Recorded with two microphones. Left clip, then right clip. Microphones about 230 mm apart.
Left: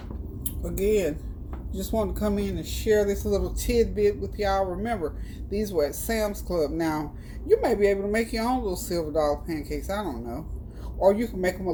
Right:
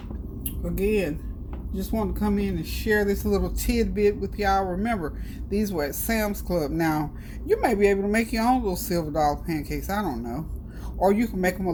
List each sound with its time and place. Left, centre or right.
1.9 s speech: right